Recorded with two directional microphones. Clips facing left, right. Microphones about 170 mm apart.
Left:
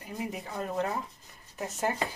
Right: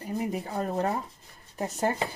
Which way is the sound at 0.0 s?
35° right (ahead or behind).